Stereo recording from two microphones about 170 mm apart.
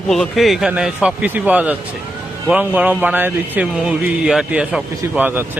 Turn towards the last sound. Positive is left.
turn(degrees=-10)  # may be behind; listen again after turning